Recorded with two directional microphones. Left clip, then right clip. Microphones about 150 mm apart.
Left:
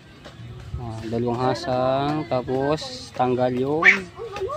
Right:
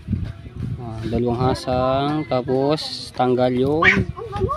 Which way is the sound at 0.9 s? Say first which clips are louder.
Right 3 dB; 25° right (ahead or behind).